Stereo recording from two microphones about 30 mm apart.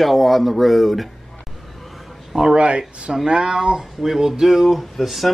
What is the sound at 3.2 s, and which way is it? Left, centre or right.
Speech, right.